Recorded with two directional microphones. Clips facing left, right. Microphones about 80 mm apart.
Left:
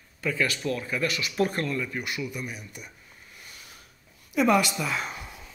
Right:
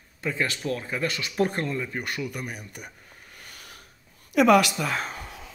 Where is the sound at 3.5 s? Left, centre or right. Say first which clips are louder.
Right 4 dB; right.